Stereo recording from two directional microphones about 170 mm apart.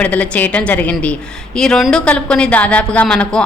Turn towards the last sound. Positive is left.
turn(degrees=5)  # may be behind; listen again after turning